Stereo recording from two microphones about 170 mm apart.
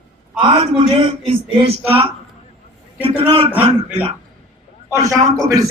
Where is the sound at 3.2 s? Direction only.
35° right (ahead or behind).